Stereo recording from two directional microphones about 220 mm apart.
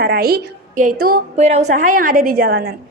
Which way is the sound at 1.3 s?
30° right (ahead or behind).